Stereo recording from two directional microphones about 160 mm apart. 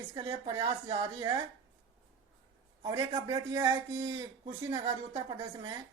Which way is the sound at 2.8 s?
25° right (ahead or behind).